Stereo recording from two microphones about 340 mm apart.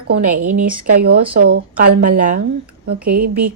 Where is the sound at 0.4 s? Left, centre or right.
Right.